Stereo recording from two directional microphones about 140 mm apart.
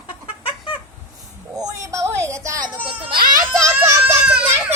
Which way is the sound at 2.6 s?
40° right (ahead or behind).